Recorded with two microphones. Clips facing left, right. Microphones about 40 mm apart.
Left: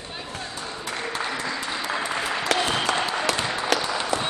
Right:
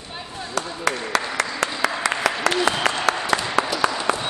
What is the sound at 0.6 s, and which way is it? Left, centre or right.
Applause, right.